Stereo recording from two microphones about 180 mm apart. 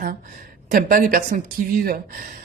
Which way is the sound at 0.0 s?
50° right (ahead or behind).